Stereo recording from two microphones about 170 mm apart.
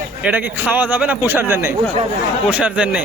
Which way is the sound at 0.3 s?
10° right (ahead or behind).